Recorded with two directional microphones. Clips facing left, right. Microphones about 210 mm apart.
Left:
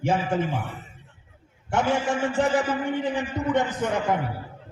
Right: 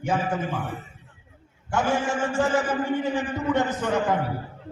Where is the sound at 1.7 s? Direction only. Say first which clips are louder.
Left 1 dB; 20° left (ahead or behind).